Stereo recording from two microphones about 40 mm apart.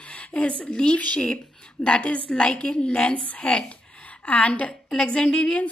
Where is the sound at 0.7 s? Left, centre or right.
Left.